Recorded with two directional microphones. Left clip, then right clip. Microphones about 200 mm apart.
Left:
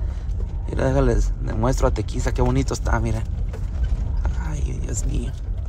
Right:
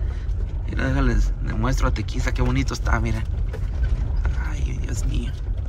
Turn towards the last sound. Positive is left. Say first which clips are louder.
# left 2 dB
turn(degrees=20)  # may be behind; listen again after turning